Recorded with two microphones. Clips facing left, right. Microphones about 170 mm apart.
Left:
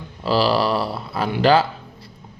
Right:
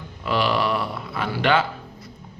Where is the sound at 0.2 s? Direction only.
35° left (ahead or behind).